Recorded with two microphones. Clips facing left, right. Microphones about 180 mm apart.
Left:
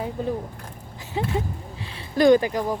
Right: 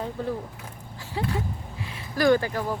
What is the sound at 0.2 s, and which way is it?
Speech, 15° left (ahead or behind).